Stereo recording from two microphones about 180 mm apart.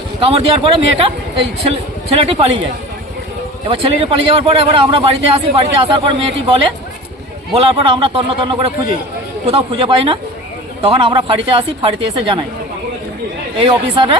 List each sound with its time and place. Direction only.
0.2 s a man's voice: 30° right (ahead or behind)
3.7 s a man's voice: 30° right (ahead or behind)
7.5 s a man's voice: 30° right (ahead or behind)
13.6 s speech: 30° right (ahead or behind)